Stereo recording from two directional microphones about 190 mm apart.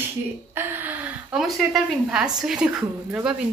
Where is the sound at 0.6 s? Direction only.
10° right (ahead or behind).